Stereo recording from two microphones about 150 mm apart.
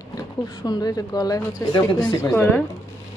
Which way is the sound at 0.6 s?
25° left (ahead or behind).